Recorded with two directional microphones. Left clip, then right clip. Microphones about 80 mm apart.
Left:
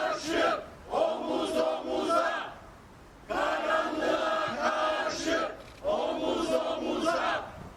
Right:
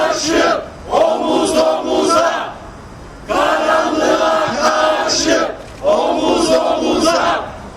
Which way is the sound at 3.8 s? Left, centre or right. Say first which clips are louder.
Right 15 dB; centre.